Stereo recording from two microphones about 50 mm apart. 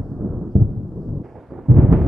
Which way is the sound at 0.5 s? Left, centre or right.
Centre.